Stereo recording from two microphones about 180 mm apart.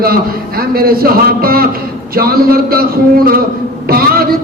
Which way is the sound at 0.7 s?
55° right (ahead or behind).